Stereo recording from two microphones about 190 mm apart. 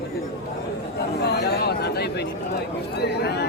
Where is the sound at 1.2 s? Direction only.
60° left (ahead or behind).